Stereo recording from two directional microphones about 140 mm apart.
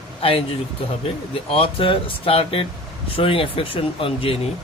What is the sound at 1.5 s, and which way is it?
Speech, 40° left (ahead or behind).